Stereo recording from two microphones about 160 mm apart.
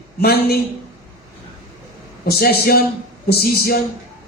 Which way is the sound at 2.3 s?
75° left (ahead or behind).